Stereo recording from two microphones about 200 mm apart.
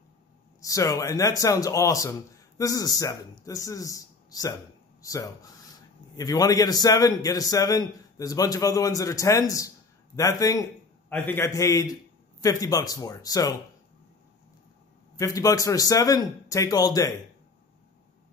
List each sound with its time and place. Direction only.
0.6 s speech: 15° left (ahead or behind)
15.1 s speech: 15° left (ahead or behind)